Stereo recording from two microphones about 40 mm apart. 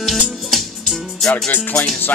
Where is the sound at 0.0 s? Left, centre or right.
Centre.